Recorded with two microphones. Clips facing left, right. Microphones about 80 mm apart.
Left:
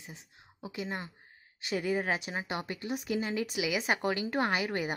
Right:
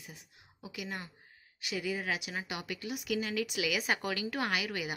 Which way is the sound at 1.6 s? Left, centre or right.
Left.